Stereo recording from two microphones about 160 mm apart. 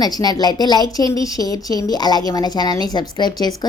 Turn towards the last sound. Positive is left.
turn(degrees=25)  # may be behind; listen again after turning